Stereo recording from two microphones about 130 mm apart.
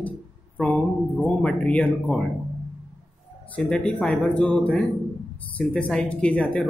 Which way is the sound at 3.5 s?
10° left (ahead or behind).